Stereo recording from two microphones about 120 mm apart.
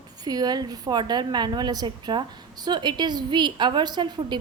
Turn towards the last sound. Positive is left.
turn(degrees=-35)  # may be behind; listen again after turning